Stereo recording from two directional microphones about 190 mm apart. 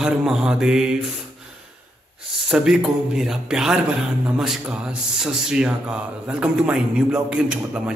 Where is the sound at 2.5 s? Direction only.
5° right (ahead or behind).